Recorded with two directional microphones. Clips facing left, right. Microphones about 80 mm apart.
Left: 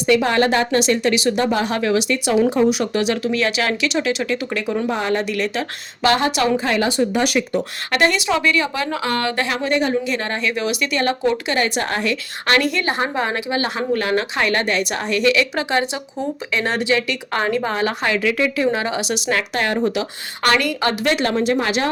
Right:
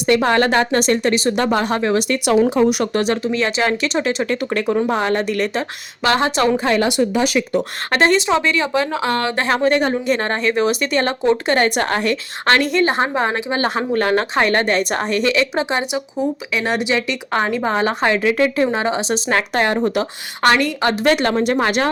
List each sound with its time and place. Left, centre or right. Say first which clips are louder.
0.1 s speech: right 1 dB; right
3.3 s a woman's voice: right 2 dB; right
6.0 s a woman's voice: right 1 dB; right
6.7 s speech: right 2 dB; right
7.9 s speech: right 3 dB; right
12.5 s speech: right 3 dB; right
20.4 s a woman's voice: right 2 dB; right
21.0 s speech: right 4 dB; right